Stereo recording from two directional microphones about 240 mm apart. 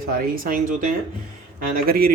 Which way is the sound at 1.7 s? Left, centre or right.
Right.